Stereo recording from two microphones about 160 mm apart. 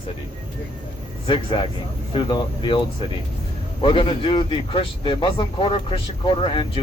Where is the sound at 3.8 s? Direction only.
35° left (ahead or behind).